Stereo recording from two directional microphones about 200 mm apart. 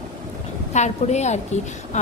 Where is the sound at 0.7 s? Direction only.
35° left (ahead or behind).